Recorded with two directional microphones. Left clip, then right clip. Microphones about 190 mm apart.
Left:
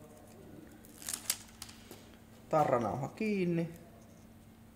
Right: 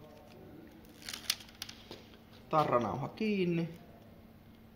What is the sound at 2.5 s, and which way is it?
Speech, 35° left (ahead or behind).